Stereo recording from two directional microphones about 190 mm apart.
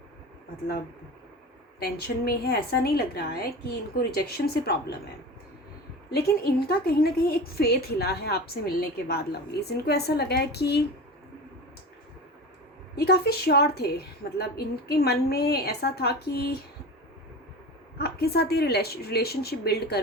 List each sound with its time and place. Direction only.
1.8 s a woman's voice: 55° left (ahead or behind)
6.1 s a woman's voice: 55° left (ahead or behind)
13.0 s a woman's voice: 55° left (ahead or behind)
17.9 s a woman's voice: 55° left (ahead or behind)